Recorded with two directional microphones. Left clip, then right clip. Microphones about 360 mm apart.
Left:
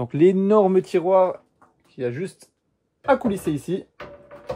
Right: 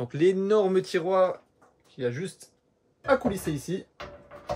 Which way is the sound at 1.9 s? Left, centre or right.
Centre.